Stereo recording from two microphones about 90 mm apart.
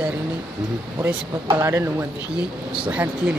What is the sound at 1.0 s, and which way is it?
Speech, 30° right (ahead or behind).